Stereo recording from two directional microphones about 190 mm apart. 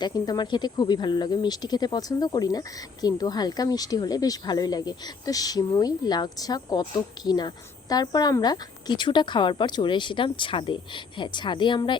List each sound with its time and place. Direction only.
0.0 s speech: 20° left (ahead or behind)